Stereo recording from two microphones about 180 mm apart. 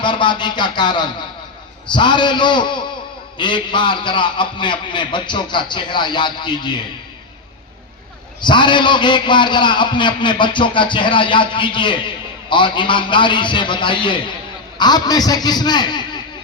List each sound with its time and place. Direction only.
0.0 s a man's voice: 25° left (ahead or behind)
8.4 s a man's voice: 25° left (ahead or behind)